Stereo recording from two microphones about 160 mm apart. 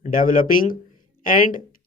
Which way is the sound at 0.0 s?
60° left (ahead or behind).